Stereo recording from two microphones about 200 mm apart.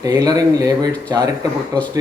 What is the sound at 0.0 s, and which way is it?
A man's voice, 20° right (ahead or behind).